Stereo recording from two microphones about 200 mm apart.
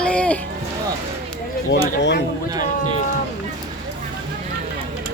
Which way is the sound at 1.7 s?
60° left (ahead or behind).